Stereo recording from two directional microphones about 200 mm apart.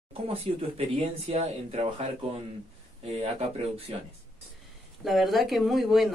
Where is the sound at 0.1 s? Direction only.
30° right (ahead or behind).